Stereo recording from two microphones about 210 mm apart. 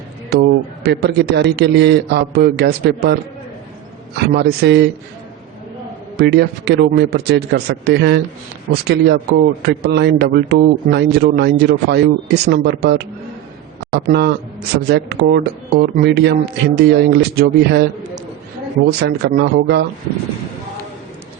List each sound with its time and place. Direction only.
0.3 s a man's voice: 50° right (ahead or behind)
4.4 s a man's voice: 50° right (ahead or behind)
6.1 s a man's voice: 50° right (ahead or behind)
18.9 s a man's voice: 50° right (ahead or behind)